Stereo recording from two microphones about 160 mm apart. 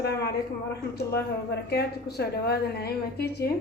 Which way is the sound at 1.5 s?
90° left.